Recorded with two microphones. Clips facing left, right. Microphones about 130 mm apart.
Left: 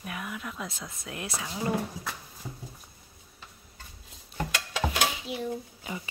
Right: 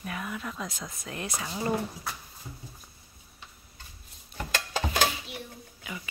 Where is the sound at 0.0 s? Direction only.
5° left (ahead or behind).